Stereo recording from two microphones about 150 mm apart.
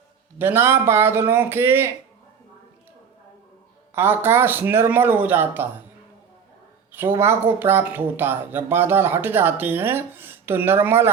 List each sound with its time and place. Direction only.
0.3 s speech: 15° right (ahead or behind)
3.9 s speech: 15° right (ahead or behind)
6.9 s speech: 15° right (ahead or behind)